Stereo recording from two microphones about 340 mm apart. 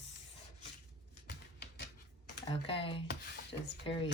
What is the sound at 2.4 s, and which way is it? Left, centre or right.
Speech, centre.